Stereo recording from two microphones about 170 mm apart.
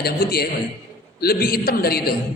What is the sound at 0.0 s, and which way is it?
A man's voice, 65° left (ahead or behind).